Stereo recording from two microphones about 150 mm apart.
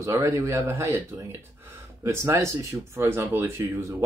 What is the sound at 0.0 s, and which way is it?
Speech, 20° right (ahead or behind).